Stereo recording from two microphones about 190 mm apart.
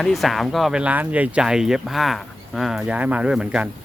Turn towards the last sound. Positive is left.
turn(degrees=-5)  # may be behind; listen again after turning